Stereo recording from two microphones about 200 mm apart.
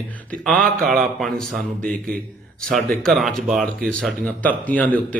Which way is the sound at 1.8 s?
45° right (ahead or behind).